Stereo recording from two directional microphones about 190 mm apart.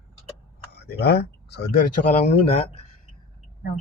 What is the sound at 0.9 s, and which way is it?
Speech, 60° left (ahead or behind).